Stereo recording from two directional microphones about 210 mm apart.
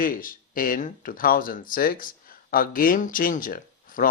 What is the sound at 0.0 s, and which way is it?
Speech, 40° left (ahead or behind).